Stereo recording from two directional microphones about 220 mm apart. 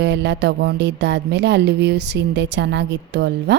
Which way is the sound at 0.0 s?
55° right (ahead or behind).